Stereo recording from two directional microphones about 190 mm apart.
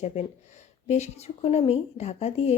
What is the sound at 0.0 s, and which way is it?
A woman's voice, 35° left (ahead or behind).